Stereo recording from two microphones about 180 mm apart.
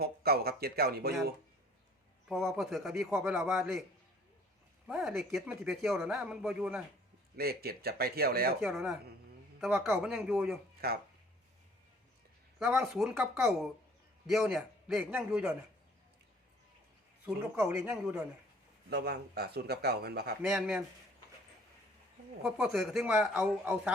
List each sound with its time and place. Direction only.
0.0 s speech: 60° right (ahead or behind)
2.6 s speech: centre (ahead or behind)
4.9 s speech: centre (ahead or behind)
7.3 s speech: 60° right (ahead or behind)
8.6 s speech: centre (ahead or behind)
10.8 s speech: 60° right (ahead or behind)
12.5 s speech: centre (ahead or behind)
17.7 s speech: 5° right (ahead or behind)
18.9 s speech: 65° right (ahead or behind)
20.4 s speech: centre (ahead or behind)
22.4 s speech: centre (ahead or behind)